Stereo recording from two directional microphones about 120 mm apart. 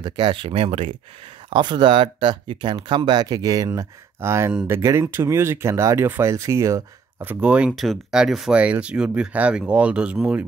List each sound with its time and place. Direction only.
0.0 s speech: 40° right (ahead or behind)
1.5 s speech: 40° right (ahead or behind); by 10.4 s 10° right (ahead or behind)